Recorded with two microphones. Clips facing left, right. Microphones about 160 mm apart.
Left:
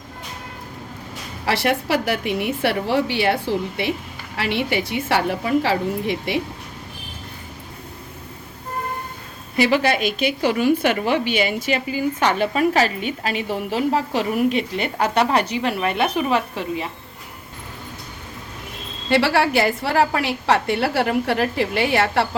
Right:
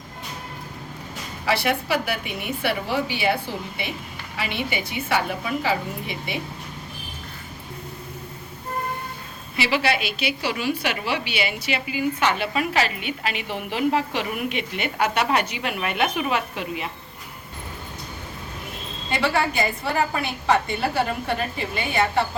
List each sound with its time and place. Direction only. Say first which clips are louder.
1.5 s a woman's voice: left 2 dB; 70° left (ahead or behind)
4.4 s a woman's voice: left 6 dB; 80° left
9.6 s a woman's voice: left 5 dB; 45° left (ahead or behind)
19.1 s a woman's voice: left 5 dB; 80° left